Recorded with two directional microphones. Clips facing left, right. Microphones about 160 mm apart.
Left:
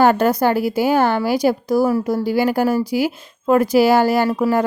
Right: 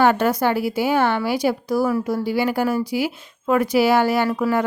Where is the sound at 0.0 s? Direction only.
40° left (ahead or behind).